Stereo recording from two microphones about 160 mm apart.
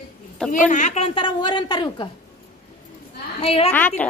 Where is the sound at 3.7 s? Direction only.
10° left (ahead or behind).